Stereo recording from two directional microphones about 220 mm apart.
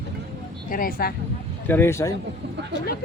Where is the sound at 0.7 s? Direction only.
40° left (ahead or behind).